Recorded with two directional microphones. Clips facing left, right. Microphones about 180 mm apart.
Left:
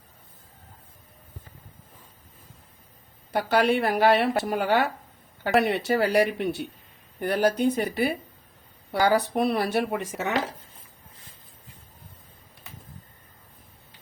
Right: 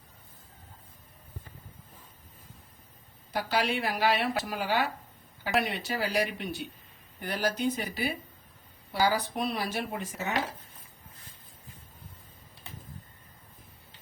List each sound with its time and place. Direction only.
3.3 s speech: 60° left (ahead or behind); by 10.3 s 85° left